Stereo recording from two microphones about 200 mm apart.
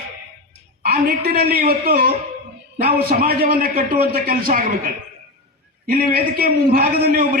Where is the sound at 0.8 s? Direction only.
50° right (ahead or behind).